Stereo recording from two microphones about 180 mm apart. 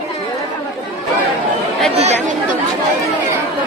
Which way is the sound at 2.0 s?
40° right (ahead or behind).